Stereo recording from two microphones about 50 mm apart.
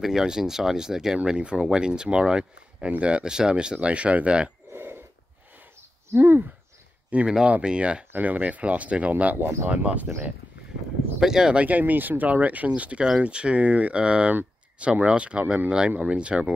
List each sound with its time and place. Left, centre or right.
0.0 s speech: centre
4.7 s a sound: right
6.1 s speech: right
7.1 s speech: right
8.2 s speech: right
11.1 s speech: centre
11.5 s speech: right